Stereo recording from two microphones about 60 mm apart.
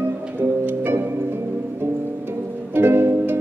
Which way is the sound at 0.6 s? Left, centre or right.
Right.